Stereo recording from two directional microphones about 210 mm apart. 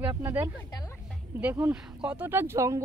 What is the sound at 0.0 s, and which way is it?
Speech, 15° right (ahead or behind).